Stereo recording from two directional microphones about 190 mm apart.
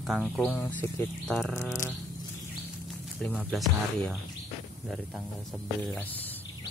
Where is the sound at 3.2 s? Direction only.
Centre (ahead or behind).